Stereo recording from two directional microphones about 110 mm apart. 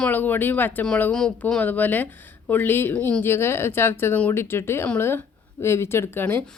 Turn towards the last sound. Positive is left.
turn(degrees=10)  # may be behind; listen again after turning